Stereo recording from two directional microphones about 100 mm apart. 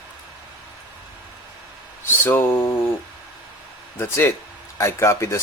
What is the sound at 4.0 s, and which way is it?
Speech, 25° left (ahead or behind).